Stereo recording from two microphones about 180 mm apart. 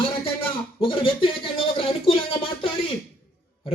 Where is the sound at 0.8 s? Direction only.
30° left (ahead or behind).